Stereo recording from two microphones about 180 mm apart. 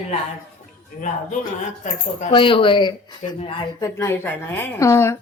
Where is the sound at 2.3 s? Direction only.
30° left (ahead or behind).